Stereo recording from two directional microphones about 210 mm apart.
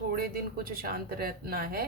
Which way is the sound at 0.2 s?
45° right (ahead or behind).